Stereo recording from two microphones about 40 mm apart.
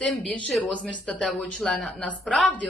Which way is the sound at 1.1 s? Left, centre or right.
Left.